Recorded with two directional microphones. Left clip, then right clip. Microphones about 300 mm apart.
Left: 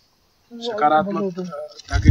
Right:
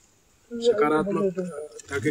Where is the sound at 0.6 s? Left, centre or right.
Centre.